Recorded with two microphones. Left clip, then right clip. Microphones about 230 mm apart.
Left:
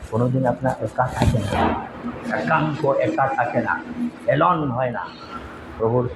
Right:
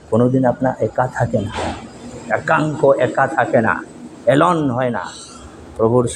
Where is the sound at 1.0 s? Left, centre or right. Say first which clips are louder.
Right 2 dB; right.